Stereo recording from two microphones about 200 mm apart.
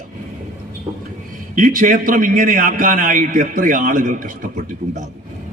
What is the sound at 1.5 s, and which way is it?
A man's voice, 45° right (ahead or behind).